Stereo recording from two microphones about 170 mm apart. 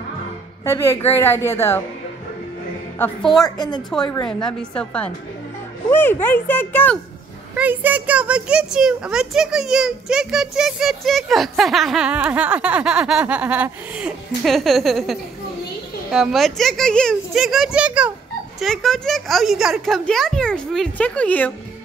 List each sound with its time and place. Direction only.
0.7 s speech: 15° left (ahead or behind)
3.0 s speech: centre (ahead or behind)
3.4 s a woman's voice: 25° left (ahead or behind)
4.3 s speech: 5° left (ahead or behind)
7.5 s speech: 10° right (ahead or behind); by 21.5 s 10° left (ahead or behind)